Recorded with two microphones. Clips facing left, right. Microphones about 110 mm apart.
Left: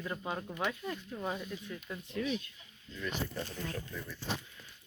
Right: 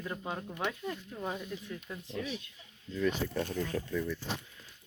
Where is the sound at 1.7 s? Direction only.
30° right (ahead or behind).